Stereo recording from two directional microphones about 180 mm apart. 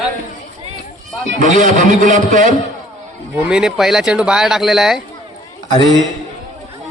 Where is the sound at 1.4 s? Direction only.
45° right (ahead or behind).